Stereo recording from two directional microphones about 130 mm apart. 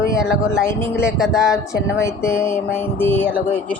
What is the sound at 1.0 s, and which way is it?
Speech, centre (ahead or behind).